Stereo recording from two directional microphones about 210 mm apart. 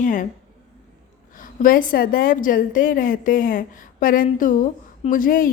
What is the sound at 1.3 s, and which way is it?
A woman's voice, 40° left (ahead or behind).